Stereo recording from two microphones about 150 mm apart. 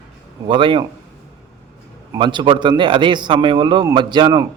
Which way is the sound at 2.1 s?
30° right (ahead or behind).